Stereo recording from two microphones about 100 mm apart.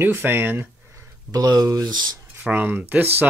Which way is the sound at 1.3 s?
40° right (ahead or behind).